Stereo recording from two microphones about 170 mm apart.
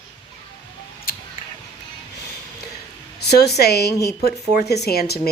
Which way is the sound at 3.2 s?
75° left (ahead or behind).